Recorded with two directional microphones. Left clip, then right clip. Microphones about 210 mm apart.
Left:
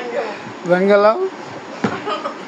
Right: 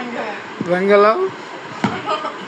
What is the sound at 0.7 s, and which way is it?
Speech, 25° left (ahead or behind).